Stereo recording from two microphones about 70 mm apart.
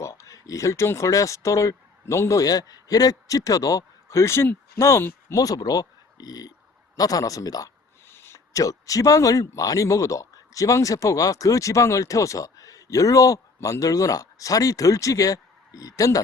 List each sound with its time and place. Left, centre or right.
0.0 s speech: left
2.4 s a man's voice: left
5.3 s speech: left
8.0 s a sound: left
8.5 s speech: left